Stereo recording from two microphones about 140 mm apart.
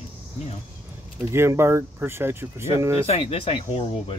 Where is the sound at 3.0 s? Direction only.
45° left (ahead or behind).